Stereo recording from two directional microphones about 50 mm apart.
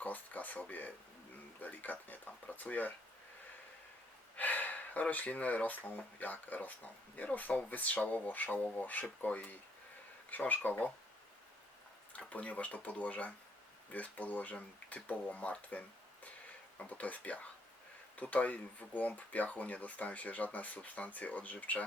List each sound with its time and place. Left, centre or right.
0.0 s speech: left
4.4 s speech: left
12.1 s speech: left